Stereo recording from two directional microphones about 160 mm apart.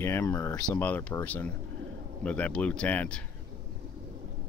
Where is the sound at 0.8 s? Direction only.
10° left (ahead or behind).